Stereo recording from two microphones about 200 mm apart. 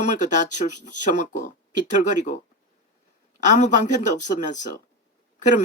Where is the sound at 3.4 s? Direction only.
40° left (ahead or behind).